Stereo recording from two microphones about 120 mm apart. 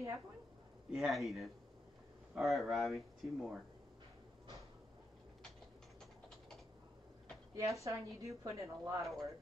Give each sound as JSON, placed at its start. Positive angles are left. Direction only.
{"t": 0.9, "sound": "speech", "side_deg": 0}
{"t": 7.5, "sound": "a woman's voice", "side_deg": -25}
{"t": 9.0, "sound": "speech", "side_deg": 0}